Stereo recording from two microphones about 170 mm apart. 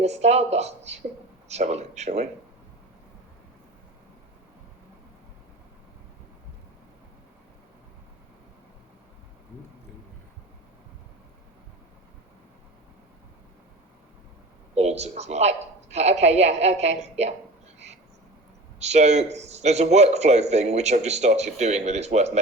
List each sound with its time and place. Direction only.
0.0 s a man's voice: 40° right (ahead or behind)
14.8 s a man's voice: 40° right (ahead or behind)
18.8 s a man's voice: 40° right (ahead or behind)